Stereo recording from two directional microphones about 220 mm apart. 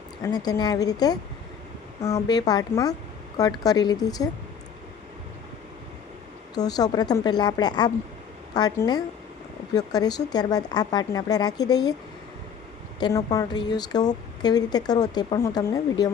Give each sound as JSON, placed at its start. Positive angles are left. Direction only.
{"t": 0.2, "sound": "speech", "side_deg": 15}
{"t": 6.7, "sound": "speech", "side_deg": 15}
{"t": 13.0, "sound": "speech", "side_deg": 15}